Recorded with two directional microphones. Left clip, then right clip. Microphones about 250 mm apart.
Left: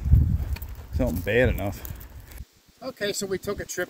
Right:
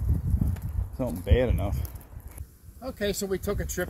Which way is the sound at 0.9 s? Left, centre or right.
Centre.